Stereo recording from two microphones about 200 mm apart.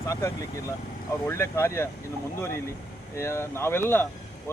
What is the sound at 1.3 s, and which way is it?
Speech, 15° left (ahead or behind).